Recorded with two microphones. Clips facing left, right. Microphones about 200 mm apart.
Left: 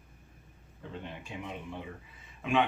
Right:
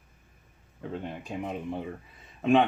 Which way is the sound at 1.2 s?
40° right (ahead or behind).